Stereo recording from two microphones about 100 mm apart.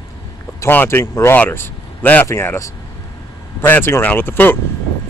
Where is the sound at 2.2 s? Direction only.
25° left (ahead or behind).